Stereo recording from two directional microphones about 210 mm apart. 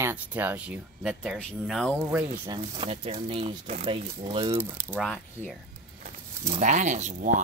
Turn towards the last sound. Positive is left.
turn(degrees=-35)  # may be behind; listen again after turning